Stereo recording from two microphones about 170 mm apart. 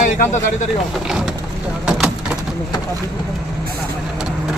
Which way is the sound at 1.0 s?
Centre (ahead or behind).